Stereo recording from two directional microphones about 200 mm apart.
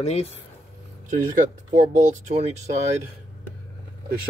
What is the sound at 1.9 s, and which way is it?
Speech, 35° right (ahead or behind).